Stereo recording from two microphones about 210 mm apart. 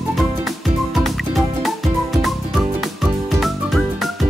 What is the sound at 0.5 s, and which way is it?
Music, centre (ahead or behind).